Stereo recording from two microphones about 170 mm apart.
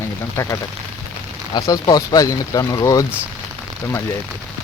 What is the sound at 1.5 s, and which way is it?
Speech, 20° left (ahead or behind).